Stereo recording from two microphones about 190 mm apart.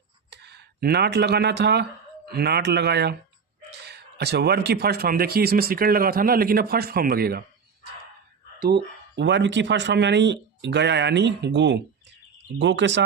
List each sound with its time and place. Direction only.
0.3 s a man's voice: 60° right (ahead or behind)
8.6 s speech: 65° right (ahead or behind)